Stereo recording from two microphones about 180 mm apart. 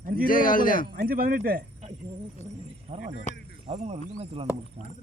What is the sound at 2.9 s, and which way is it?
Speech, 45° right (ahead or behind).